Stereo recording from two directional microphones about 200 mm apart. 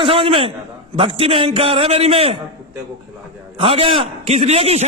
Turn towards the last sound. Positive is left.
turn(degrees=-30)  # may be behind; listen again after turning